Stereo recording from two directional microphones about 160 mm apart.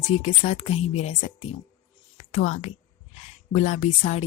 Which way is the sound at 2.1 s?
50° left (ahead or behind).